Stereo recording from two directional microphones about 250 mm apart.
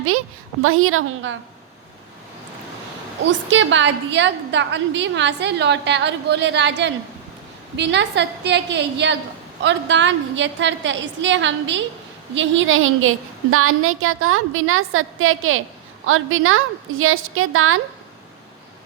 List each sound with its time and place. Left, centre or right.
0.6 s a woman's voice: right
3.2 s a woman's voice: right